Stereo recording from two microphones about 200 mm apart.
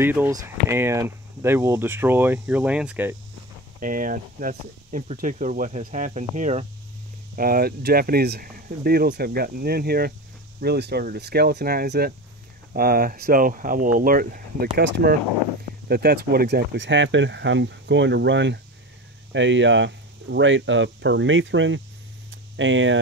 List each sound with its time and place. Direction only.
0.0 s speech: 10° right (ahead or behind)
3.8 s speech: 45° right (ahead or behind)
7.3 s speech: 45° right (ahead or behind); by 21.8 s 70° right (ahead or behind)
22.3 s a sound: 70° right (ahead or behind)